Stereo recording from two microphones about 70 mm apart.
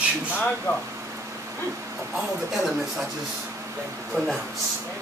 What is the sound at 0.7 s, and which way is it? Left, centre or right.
Speech, left.